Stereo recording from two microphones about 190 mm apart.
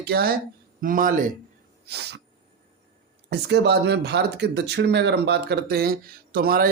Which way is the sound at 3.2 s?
60° right (ahead or behind).